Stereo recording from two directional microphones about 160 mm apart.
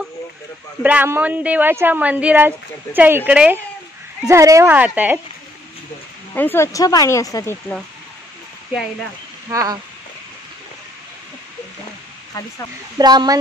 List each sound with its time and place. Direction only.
0.8 s speech: 10° right (ahead or behind)
6.3 s speech: 15° left (ahead or behind)
9.5 s speech: 20° right (ahead or behind)
12.9 s speech: 25° right (ahead or behind)